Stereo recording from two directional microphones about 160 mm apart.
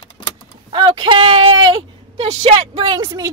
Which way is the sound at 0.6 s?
30° right (ahead or behind).